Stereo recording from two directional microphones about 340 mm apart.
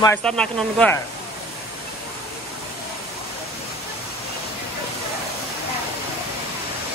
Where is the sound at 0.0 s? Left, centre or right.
Centre.